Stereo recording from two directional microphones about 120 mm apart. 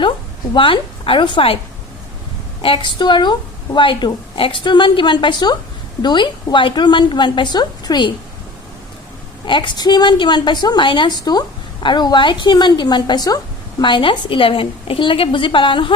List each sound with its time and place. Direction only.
0.5 s speech: 45° left (ahead or behind)
2.6 s a woman's voice: 45° left (ahead or behind)
9.5 s a woman's voice: 40° left (ahead or behind)